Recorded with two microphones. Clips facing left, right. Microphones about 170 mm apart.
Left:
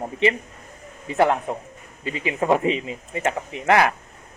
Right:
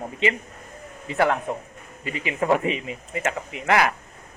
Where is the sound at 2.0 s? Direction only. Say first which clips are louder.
Left 2 dB; 25° left (ahead or behind).